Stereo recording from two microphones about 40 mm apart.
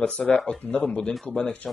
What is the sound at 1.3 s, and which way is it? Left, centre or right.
Speech, left.